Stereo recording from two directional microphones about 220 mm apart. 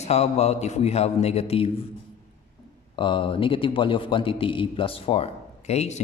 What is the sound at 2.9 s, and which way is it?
A man's voice, 25° left (ahead or behind).